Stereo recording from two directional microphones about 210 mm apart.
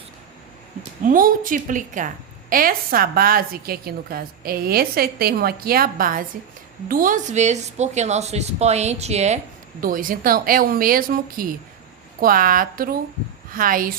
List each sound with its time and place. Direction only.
1.0 s a woman's voice: 40° right (ahead or behind)